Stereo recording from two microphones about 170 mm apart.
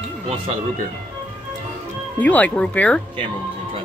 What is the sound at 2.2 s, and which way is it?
Speech, 10° left (ahead or behind).